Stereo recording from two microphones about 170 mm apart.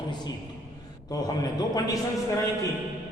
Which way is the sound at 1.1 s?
20° left (ahead or behind).